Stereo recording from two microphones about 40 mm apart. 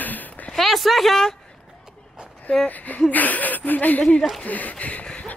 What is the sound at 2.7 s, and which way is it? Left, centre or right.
Speech, left.